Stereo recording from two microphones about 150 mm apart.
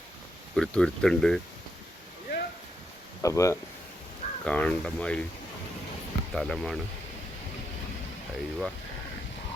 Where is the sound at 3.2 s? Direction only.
20° left (ahead or behind).